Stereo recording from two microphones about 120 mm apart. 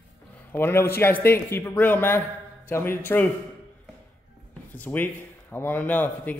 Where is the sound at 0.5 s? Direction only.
20° left (ahead or behind).